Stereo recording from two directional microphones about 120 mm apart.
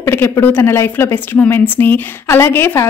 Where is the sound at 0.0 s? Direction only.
20° left (ahead or behind).